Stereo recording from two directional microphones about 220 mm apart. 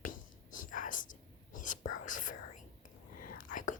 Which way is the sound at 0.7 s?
35° left (ahead or behind).